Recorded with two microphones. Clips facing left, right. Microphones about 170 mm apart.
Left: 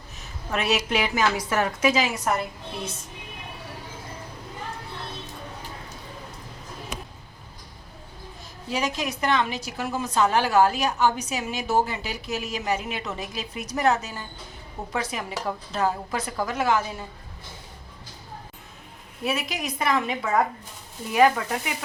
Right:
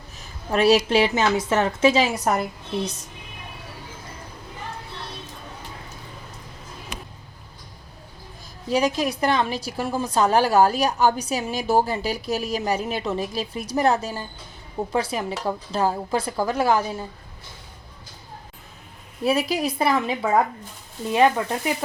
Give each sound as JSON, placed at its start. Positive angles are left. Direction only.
{"t": 0.5, "sound": "a woman's voice", "side_deg": -35}
{"t": 8.7, "sound": "a woman's voice", "side_deg": -35}
{"t": 19.2, "sound": "a woman's voice", "side_deg": -35}